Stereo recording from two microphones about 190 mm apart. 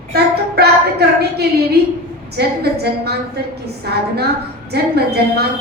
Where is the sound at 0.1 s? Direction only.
60° right (ahead or behind).